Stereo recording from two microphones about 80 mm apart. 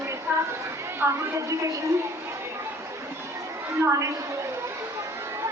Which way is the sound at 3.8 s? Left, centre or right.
Right.